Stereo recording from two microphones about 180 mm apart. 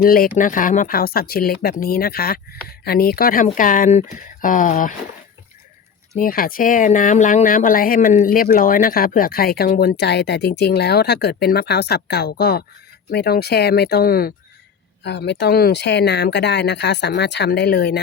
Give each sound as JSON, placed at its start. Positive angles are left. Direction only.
{"t": 0.0, "sound": "speech", "side_deg": 55}
{"t": 6.1, "sound": "speech", "side_deg": 50}
{"t": 15.0, "sound": "speech", "side_deg": 70}